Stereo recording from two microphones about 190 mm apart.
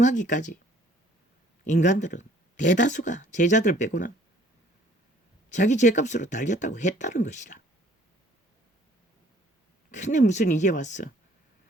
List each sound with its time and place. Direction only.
0.0 s speech: 40° left (ahead or behind)
1.6 s speech: 40° left (ahead or behind)
5.5 s speech: 40° left (ahead or behind)
9.9 s speech: 40° left (ahead or behind)